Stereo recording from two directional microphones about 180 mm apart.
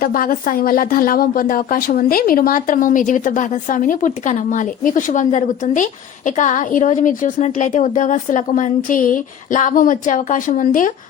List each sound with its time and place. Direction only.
0.0 s speech: 55° left (ahead or behind)